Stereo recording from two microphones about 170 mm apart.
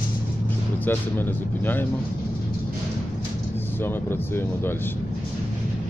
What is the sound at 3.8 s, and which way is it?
Speech, 15° left (ahead or behind).